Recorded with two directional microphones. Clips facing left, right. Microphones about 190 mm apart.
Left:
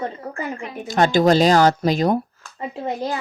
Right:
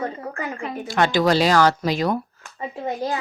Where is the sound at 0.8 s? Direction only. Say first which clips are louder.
Left 3 dB; 45° left (ahead or behind).